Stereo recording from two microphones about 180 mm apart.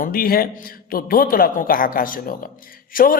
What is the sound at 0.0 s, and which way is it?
A man's voice, 55° left (ahead or behind).